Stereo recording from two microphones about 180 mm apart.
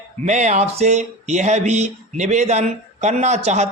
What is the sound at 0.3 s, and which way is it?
Speech, 40° right (ahead or behind).